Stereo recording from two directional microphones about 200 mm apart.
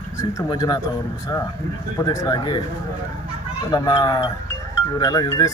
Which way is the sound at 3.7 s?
20° left (ahead or behind).